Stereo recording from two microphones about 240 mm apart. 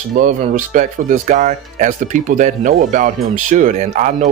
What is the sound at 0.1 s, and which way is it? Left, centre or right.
Speech, right.